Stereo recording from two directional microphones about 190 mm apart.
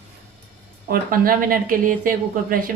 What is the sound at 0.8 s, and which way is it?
Speech, 50° right (ahead or behind).